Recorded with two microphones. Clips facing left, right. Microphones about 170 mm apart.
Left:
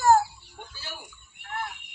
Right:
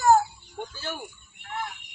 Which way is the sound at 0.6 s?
50° right (ahead or behind).